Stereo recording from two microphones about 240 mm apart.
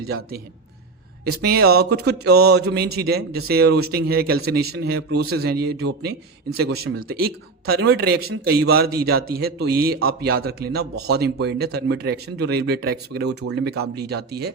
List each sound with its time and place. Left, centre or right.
1.4 s speech: right